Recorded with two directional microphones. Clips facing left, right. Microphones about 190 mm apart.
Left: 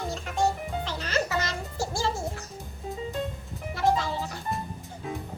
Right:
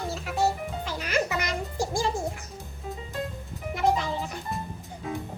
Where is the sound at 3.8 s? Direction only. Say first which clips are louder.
Even; 15° right (ahead or behind).